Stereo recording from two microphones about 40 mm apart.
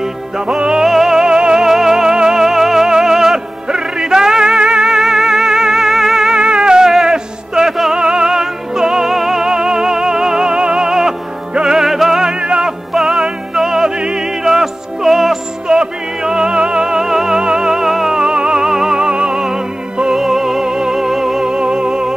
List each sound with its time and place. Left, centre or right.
0.6 s music: right
0.8 s music: centre
6.3 s music: right
12.9 s music: centre
15.7 s music: centre
18.1 s music: centre